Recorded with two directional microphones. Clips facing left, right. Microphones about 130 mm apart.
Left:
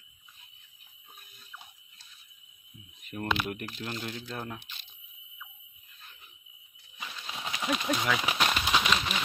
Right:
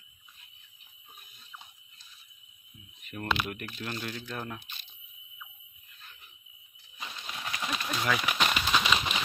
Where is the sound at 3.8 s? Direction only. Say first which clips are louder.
Right 3 dB; 20° left (ahead or behind).